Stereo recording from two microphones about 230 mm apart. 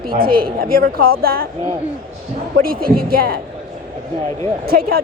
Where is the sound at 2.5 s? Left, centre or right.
Right.